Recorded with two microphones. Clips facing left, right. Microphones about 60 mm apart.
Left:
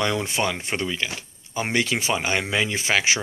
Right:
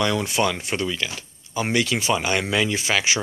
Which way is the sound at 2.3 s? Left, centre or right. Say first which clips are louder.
Right 2 dB; centre.